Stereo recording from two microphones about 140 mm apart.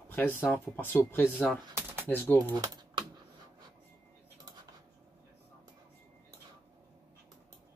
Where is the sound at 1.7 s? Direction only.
15° right (ahead or behind).